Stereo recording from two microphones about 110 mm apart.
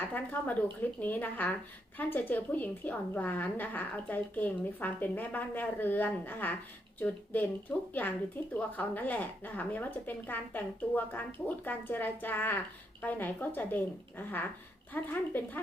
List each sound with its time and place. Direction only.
0.1 s a woman's voice: 15° left (ahead or behind)